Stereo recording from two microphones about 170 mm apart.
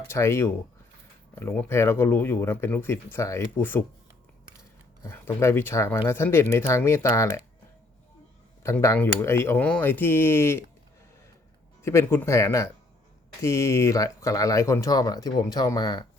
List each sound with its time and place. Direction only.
0.1 s speech: 15° left (ahead or behind)
5.0 s speech: 15° left (ahead or behind)
8.6 s speech: 15° left (ahead or behind)
11.8 s speech: 15° left (ahead or behind)